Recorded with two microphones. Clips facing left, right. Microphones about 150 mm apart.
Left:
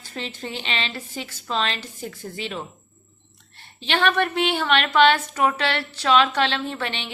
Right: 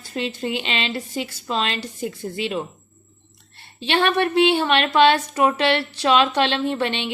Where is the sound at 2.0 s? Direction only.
15° right (ahead or behind).